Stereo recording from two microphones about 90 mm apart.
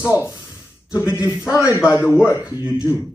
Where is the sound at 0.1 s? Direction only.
30° left (ahead or behind).